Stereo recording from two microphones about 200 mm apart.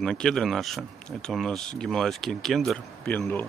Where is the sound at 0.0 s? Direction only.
5° left (ahead or behind).